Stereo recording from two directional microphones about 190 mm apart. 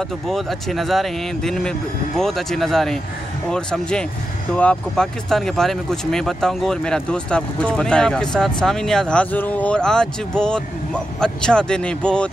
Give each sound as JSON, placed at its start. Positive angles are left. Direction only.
{"t": 0.3, "sound": "speech", "side_deg": 0}